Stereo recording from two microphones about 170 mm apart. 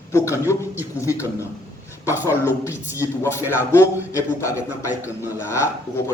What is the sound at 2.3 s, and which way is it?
Speech, 15° left (ahead or behind).